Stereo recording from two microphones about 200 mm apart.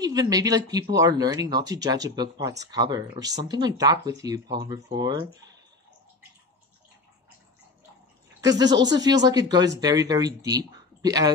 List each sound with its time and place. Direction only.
0.0 s speech: 20° right (ahead or behind)
8.4 s speech: 20° right (ahead or behind)